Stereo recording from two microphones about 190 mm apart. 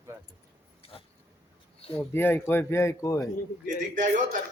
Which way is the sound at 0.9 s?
30° left (ahead or behind).